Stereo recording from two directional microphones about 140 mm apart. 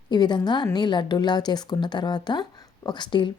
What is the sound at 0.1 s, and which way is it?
A woman's voice, 30° left (ahead or behind).